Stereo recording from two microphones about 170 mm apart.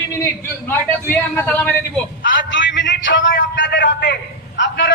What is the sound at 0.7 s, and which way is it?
Speech, 10° left (ahead or behind).